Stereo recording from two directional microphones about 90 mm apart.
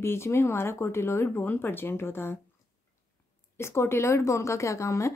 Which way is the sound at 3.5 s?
30° left (ahead or behind).